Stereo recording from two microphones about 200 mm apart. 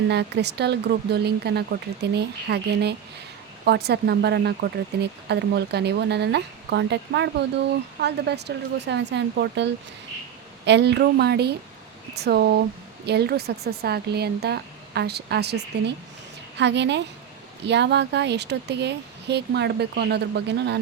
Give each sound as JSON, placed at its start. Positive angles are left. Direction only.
{"t": 0.1, "sound": "speech", "side_deg": -55}
{"t": 10.7, "sound": "speech", "side_deg": -60}